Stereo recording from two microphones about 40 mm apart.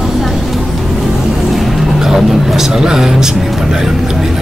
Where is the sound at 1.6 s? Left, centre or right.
Centre.